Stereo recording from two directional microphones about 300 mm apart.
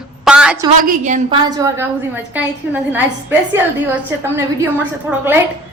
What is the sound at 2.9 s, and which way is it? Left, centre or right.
Speech, centre.